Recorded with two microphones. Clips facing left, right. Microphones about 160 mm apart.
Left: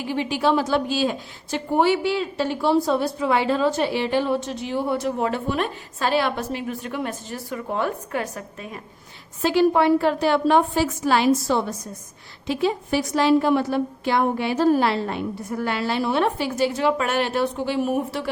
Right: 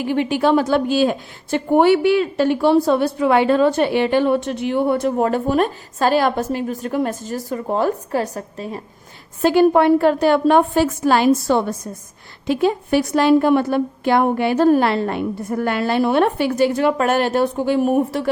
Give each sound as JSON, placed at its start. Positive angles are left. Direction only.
{"t": 0.0, "sound": "a woman's voice", "side_deg": -55}
{"t": 9.4, "sound": "a woman's voice", "side_deg": -50}